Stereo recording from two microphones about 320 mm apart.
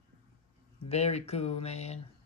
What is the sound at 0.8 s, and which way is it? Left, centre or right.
Speech, centre.